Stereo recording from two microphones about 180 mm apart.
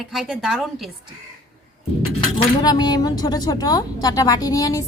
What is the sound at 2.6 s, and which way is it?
A woman's voice, 25° left (ahead or behind).